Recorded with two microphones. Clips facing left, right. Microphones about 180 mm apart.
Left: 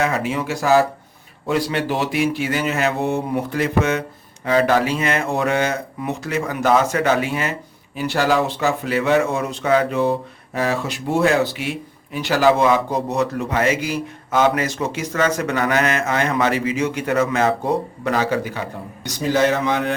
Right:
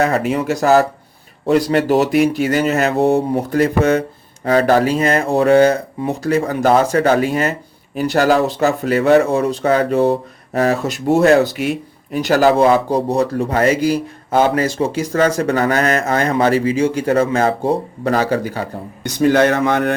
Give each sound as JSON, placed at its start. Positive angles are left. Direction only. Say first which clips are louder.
{"t": 0.0, "sound": "a man's voice", "louder": "right 5 dB", "side_deg": -40}
{"t": 19.0, "sound": "speech", "louder": "right 5 dB", "side_deg": -60}